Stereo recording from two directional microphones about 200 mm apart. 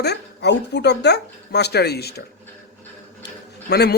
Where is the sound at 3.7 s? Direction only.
55° left (ahead or behind).